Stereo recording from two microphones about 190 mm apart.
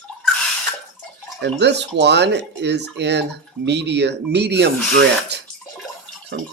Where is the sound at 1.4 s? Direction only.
65° right (ahead or behind).